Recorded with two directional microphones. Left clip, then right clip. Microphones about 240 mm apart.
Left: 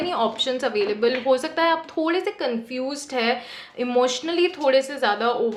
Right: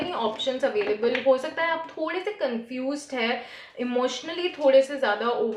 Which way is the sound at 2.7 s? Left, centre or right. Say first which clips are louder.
Left 3 dB; left.